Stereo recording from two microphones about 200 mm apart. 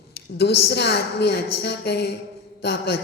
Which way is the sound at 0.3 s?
55° left (ahead or behind).